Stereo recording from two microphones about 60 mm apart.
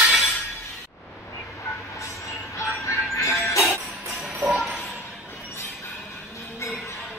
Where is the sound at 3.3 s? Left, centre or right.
Left.